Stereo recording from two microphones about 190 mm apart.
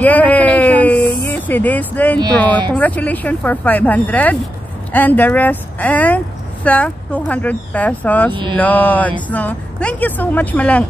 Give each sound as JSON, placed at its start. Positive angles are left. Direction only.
{"t": 0.0, "sound": "a sound", "side_deg": 10}
{"t": 2.7, "sound": "speech", "side_deg": 10}
{"t": 8.3, "sound": "mantra", "side_deg": -25}
{"t": 8.5, "sound": "speech", "side_deg": 10}